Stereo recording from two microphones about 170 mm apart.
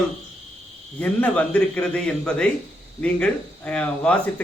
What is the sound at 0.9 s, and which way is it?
Speech, 10° left (ahead or behind).